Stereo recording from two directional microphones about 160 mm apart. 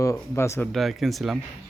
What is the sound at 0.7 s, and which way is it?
Speech, centre (ahead or behind).